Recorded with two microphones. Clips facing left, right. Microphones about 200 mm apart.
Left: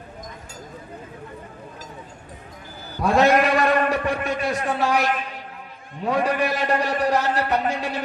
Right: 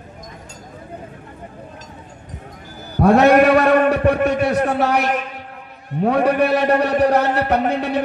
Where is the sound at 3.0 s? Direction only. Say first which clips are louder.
Right 6 dB; 60° right (ahead or behind).